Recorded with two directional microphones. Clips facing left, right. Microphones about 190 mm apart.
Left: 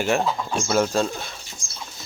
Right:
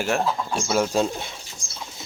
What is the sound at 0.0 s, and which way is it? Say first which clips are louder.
Speech: left 1 dB; centre (ahead or behind).